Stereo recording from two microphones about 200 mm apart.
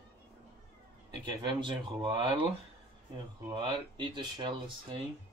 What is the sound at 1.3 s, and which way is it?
Speech, 25° right (ahead or behind).